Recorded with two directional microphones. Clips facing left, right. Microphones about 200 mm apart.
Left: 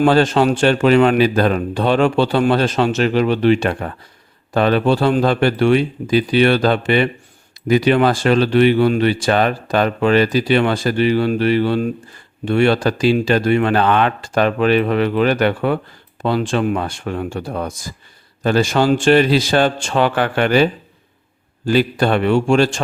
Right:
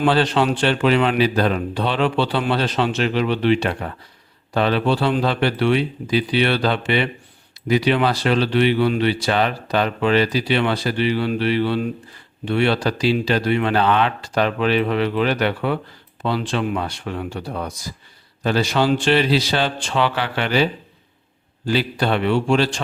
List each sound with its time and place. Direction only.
0.0 s speech: 45° left (ahead or behind)
21.7 s speech: 50° left (ahead or behind)